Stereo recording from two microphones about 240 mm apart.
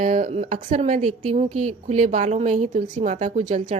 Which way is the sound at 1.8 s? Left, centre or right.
Right.